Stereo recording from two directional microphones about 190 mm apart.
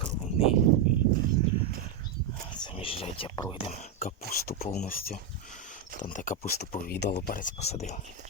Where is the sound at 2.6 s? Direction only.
30° left (ahead or behind).